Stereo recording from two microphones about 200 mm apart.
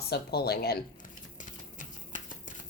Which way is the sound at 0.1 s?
55° left (ahead or behind).